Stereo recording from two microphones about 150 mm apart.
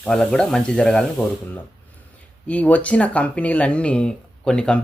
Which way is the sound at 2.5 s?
10° left (ahead or behind).